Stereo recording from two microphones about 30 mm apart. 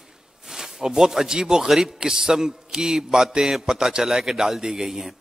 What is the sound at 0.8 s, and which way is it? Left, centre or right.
Speech, right.